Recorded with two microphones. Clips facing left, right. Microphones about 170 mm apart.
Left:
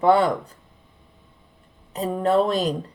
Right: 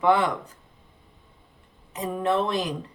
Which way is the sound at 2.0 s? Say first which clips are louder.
Left 5 dB; 35° left (ahead or behind).